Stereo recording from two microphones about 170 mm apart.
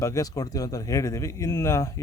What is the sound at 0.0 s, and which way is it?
Speech, 20° left (ahead or behind).